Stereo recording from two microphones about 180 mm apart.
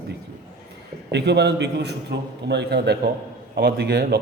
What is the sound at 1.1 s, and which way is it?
A man's voice, 70° right (ahead or behind).